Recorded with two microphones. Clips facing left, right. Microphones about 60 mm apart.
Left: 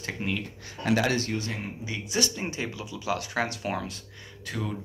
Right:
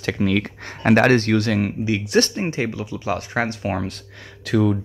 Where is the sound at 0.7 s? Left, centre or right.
Right.